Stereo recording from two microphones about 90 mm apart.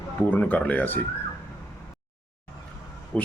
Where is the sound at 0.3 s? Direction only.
20° left (ahead or behind).